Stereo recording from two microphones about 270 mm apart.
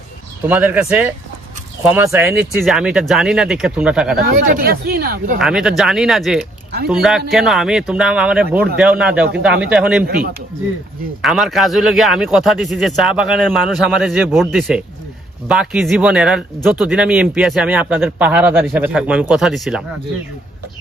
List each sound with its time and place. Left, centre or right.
0.4 s speech: centre
4.2 s speech: right
5.4 s speech: centre
10.1 s speech: right
11.2 s speech: centre